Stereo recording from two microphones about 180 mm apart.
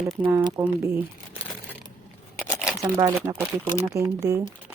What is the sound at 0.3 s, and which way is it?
Speech, 20° right (ahead or behind).